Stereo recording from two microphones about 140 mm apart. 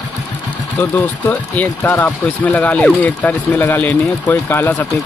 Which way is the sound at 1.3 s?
10° left (ahead or behind).